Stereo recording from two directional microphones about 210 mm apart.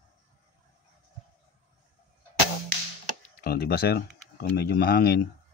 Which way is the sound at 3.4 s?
45° left (ahead or behind).